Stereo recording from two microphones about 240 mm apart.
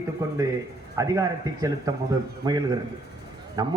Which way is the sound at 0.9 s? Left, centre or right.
Centre.